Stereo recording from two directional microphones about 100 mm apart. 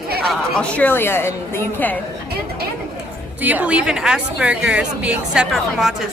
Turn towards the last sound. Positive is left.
turn(degrees=-5)  # may be behind; listen again after turning